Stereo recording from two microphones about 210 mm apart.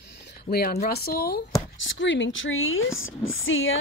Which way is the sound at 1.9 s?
60° left (ahead or behind).